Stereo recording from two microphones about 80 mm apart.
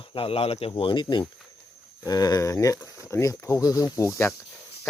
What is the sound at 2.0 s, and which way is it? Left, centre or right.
Speech, left.